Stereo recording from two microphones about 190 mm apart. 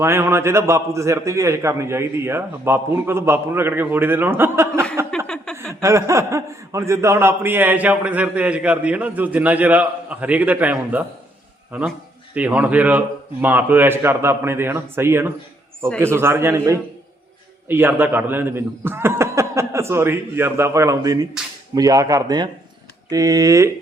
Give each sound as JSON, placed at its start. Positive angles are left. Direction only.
{"t": 0.0, "sound": "a man's voice", "side_deg": -15}
{"t": 5.1, "sound": "chuckle", "side_deg": 5}
{"t": 5.8, "sound": "a man's voice", "side_deg": -15}